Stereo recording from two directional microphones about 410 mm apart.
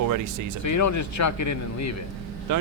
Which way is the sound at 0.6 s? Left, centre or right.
Left.